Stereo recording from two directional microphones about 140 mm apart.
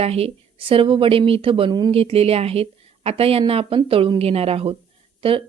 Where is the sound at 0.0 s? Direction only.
45° right (ahead or behind).